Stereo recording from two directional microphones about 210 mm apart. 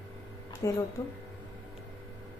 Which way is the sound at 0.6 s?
15° left (ahead or behind).